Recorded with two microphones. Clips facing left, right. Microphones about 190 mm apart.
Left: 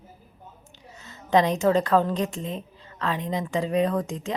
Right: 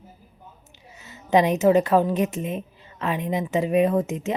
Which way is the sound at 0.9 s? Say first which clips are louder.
Right 2 dB; 20° right (ahead or behind).